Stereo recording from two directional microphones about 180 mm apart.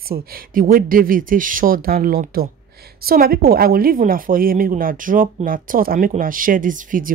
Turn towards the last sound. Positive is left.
turn(degrees=-50)  # may be behind; listen again after turning